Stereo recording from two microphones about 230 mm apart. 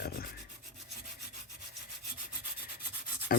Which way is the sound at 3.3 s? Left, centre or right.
Left.